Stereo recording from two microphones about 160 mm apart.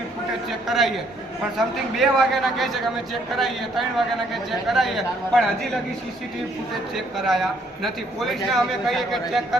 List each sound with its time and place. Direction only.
1.5 s a man's voice: centre (ahead or behind)
6.9 s a man's voice: centre (ahead or behind)